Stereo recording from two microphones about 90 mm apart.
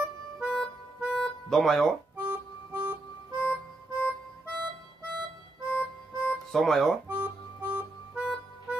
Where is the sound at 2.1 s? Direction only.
25° right (ahead or behind).